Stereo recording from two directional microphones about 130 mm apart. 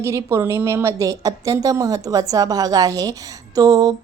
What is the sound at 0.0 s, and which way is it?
A woman's voice, 20° right (ahead or behind).